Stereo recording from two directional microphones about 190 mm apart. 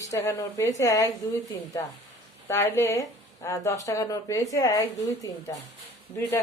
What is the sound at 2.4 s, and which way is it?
A woman's voice, 15° left (ahead or behind).